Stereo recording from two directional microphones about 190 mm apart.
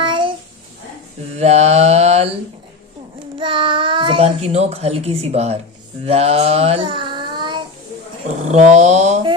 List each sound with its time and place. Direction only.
0.0 s babbling: 25° right (ahead or behind)
1.4 s mantra: 35° right (ahead or behind)
3.3 s a child's voice: 25° right (ahead or behind)
6.1 s child singing: 30° right (ahead or behind)
8.5 s mantra: 35° right (ahead or behind)